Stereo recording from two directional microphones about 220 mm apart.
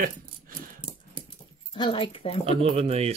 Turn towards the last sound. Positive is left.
turn(degrees=-25)  # may be behind; listen again after turning